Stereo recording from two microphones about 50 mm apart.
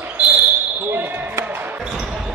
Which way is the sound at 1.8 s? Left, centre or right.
Centre.